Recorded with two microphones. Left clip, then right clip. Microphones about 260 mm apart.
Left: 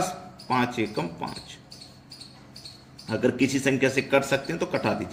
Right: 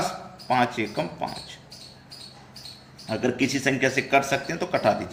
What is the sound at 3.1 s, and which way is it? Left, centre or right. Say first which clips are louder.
A man's voice: left 1 dB; left.